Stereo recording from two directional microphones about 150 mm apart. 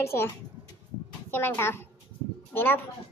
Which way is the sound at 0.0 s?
15° left (ahead or behind).